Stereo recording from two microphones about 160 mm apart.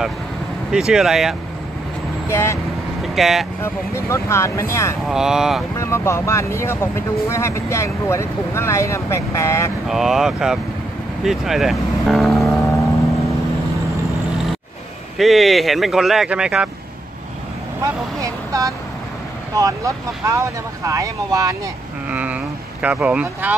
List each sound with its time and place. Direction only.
0.7 s speech: 5° right (ahead or behind)
2.2 s speech: 15° left (ahead or behind)
3.2 s speech: centre (ahead or behind)
3.6 s speech: 15° left (ahead or behind)
5.0 s speech: 5° right (ahead or behind)
5.8 s speech: 15° left (ahead or behind)
9.8 s speech: centre (ahead or behind)
15.1 s speech: centre (ahead or behind)
17.8 s speech: 20° right (ahead or behind)
22.1 s speech: 10° right (ahead or behind)